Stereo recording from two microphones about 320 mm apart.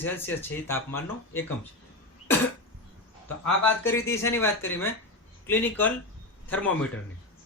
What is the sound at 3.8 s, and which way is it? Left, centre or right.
Speech, centre.